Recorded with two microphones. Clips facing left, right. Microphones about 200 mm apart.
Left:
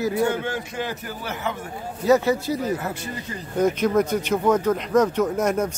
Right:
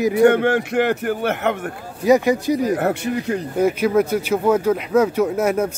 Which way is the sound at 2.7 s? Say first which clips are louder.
Right 10 dB; 70° right (ahead or behind).